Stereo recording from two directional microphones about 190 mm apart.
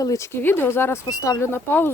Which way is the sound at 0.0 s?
15° left (ahead or behind).